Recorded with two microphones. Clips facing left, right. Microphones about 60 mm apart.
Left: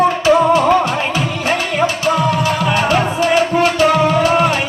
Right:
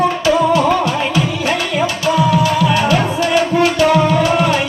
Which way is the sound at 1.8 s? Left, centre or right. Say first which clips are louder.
Right 1 dB; left.